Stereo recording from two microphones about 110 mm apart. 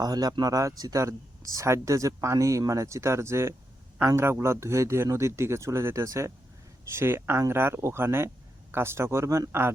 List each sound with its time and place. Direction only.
0.0 s speech: 35° right (ahead or behind)